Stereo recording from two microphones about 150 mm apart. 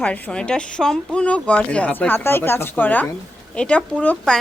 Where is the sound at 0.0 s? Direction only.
5° left (ahead or behind).